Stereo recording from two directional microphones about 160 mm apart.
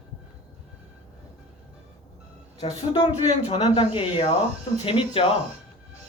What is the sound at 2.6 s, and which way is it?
A woman's voice, 40° left (ahead or behind).